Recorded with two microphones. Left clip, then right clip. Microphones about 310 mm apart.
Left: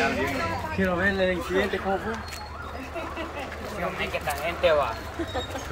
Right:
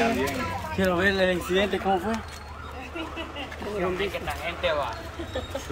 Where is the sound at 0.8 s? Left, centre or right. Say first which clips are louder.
Right 2 dB; right.